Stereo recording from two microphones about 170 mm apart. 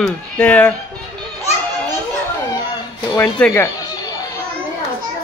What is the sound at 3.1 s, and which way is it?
Speech, 10° left (ahead or behind).